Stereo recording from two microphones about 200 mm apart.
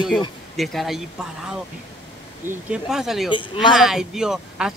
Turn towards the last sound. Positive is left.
turn(degrees=-5)  # may be behind; listen again after turning